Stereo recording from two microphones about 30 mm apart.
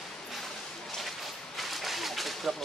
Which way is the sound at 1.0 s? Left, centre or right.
Centre.